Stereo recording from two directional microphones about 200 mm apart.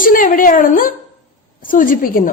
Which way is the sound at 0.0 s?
45° left (ahead or behind).